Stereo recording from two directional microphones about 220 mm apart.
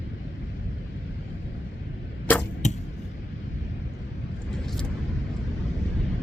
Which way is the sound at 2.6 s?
30° left (ahead or behind).